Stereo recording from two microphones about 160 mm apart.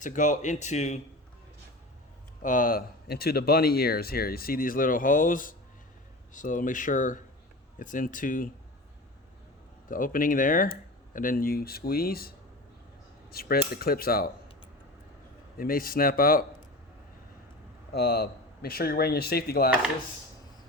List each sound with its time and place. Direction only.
0.0 s speech: 50° left (ahead or behind)
2.4 s speech: 55° left (ahead or behind)
9.9 s speech: 60° left (ahead or behind)
13.3 s speech: 70° left (ahead or behind)
15.5 s speech: 65° left (ahead or behind)
17.9 s speech: 80° left